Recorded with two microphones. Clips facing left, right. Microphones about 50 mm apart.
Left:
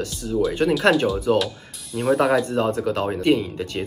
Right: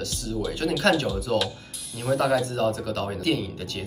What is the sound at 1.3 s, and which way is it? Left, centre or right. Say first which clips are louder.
Speech: left 6 dB; left.